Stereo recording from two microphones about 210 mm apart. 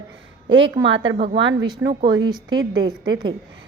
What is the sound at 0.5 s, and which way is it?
Speech, 60° right (ahead or behind).